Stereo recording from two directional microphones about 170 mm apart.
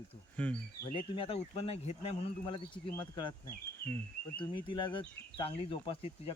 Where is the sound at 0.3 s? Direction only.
10° left (ahead or behind).